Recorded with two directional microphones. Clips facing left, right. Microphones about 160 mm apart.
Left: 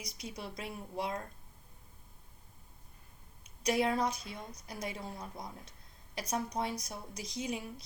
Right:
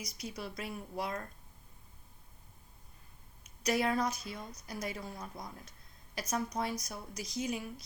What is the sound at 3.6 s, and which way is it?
A woman's voice, 25° left (ahead or behind).